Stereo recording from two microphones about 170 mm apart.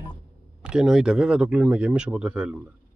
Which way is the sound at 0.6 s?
5° right (ahead or behind).